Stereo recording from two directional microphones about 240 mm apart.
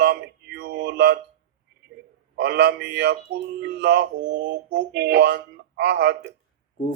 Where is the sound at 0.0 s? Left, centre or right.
Right.